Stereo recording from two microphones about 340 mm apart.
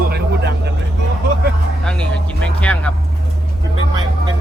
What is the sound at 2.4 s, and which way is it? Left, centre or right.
Speech, centre.